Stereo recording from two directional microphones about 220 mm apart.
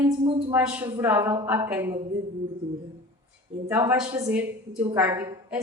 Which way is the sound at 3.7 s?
10° right (ahead or behind).